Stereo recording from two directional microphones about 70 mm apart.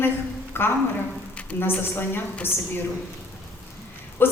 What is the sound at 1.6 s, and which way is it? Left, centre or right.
Speech, left.